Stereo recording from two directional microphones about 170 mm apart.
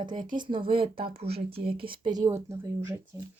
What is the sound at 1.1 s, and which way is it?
Speech, 70° right (ahead or behind).